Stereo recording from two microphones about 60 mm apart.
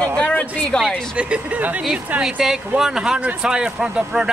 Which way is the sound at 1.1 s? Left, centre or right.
Centre.